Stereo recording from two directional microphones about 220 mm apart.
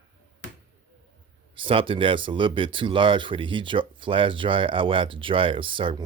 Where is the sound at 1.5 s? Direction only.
25° right (ahead or behind).